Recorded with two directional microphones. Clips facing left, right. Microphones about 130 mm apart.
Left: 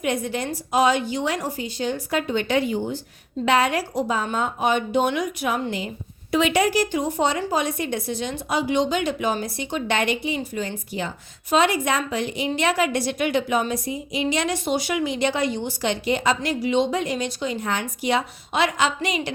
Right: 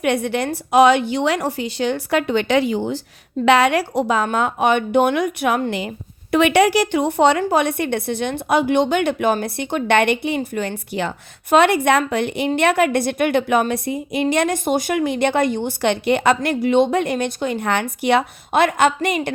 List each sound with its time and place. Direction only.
0.0 s a woman's voice: 70° right (ahead or behind); by 3.0 s 90° right
3.4 s a woman's voice: 75° right (ahead or behind); by 19.3 s 55° right (ahead or behind)